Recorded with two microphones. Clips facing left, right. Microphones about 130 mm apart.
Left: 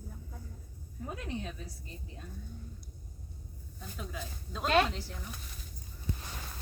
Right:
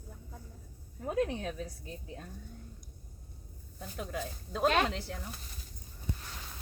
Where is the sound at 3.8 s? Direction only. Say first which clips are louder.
Right 4 dB; 50° right (ahead or behind).